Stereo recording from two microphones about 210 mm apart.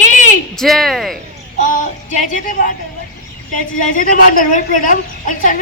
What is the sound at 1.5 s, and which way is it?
Child singing, 40° left (ahead or behind).